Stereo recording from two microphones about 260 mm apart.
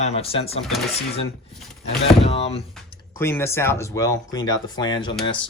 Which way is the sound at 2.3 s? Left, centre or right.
Left.